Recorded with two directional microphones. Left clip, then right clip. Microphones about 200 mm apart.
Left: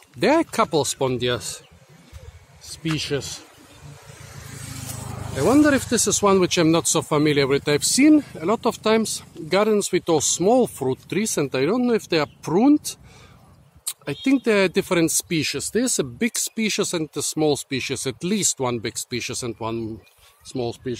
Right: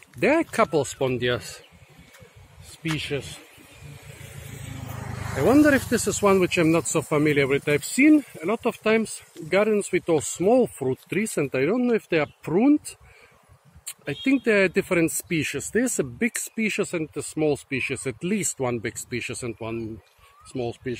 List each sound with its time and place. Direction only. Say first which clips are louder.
0.2 s speech: left 2 dB; 15° left (ahead or behind)
3.0 s a man's voice: left 4 dB; 30° left (ahead or behind)
4.3 s vehicle: left 4 dB; 30° left (ahead or behind)
5.4 s speech: left 1 dB; 10° left (ahead or behind)
13.8 s speech: left 2 dB; 15° left (ahead or behind)